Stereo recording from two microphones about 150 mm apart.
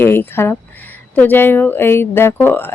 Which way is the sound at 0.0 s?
15° left (ahead or behind).